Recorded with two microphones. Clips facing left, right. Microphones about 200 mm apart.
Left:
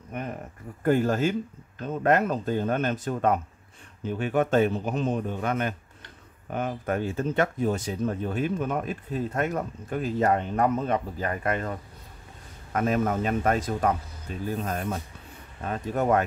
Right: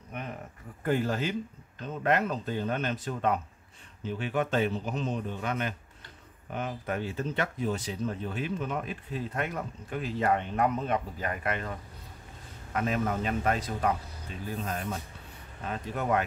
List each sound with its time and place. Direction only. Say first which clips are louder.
0.1 s a sound: left 5 dB; 45° left (ahead or behind)
0.8 s speech: left 6 dB; 45° left (ahead or behind)
12.7 s speech: left 5 dB; 45° left (ahead or behind)